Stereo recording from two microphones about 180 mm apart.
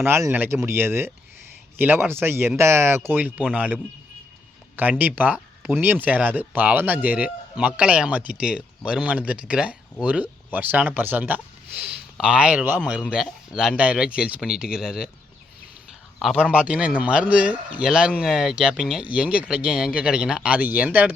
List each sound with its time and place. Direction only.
0.0 s speech: 15° right (ahead or behind)
4.8 s speech: 10° right (ahead or behind)
16.1 s speech: 5° right (ahead or behind)